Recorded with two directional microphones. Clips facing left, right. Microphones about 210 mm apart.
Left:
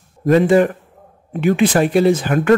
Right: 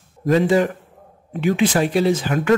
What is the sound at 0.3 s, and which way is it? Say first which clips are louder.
Speech: left 4 dB; 55° left (ahead or behind).